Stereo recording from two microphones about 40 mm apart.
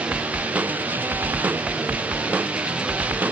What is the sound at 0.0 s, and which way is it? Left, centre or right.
Music, right.